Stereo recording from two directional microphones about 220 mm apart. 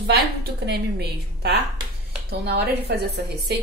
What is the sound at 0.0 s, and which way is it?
A woman's voice, 50° right (ahead or behind).